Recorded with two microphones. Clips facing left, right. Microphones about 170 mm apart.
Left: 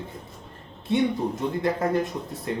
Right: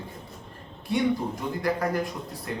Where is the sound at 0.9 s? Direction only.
25° left (ahead or behind).